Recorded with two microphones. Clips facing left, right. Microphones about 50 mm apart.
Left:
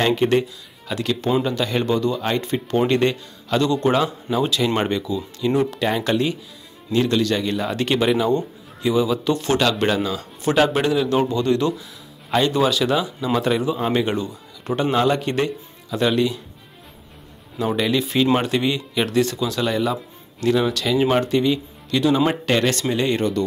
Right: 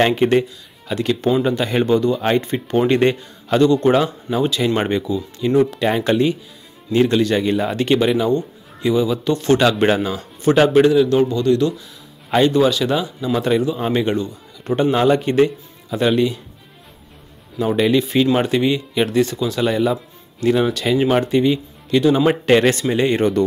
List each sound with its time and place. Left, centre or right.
0.2 s a man's voice: centre
3.6 s a man's voice: centre
9.6 s a man's voice: centre
10.4 s a man's voice: centre
11.2 s a man's voice: centre
12.3 s speech: centre
12.5 s a man's voice: centre
17.6 s a man's voice: centre
22.5 s a man's voice: centre